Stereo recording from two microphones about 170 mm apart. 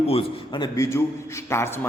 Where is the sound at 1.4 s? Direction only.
15° left (ahead or behind).